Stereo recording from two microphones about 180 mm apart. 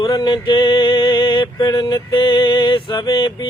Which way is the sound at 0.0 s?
25° left (ahead or behind).